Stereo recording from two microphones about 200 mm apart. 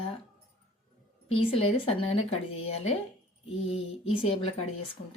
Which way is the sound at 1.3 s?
30° left (ahead or behind).